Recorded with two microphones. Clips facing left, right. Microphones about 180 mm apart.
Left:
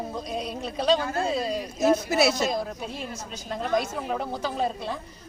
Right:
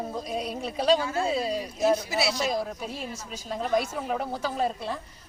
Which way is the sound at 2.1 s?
50° left (ahead or behind).